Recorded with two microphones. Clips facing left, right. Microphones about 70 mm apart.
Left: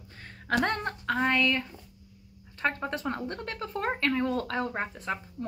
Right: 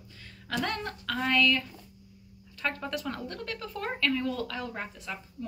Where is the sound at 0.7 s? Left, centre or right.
Left.